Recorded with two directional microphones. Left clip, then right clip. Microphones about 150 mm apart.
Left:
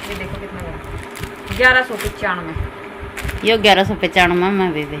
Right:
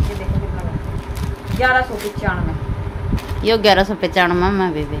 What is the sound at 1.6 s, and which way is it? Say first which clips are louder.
Speech: left 3 dB; 20° right (ahead or behind).